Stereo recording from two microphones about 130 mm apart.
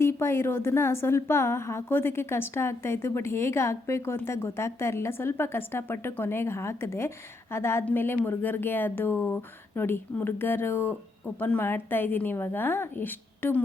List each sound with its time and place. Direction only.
0.0 s a woman's voice: 20° left (ahead or behind)